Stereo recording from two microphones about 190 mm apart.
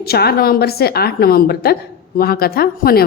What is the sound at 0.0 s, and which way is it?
A woman's voice, 55° left (ahead or behind).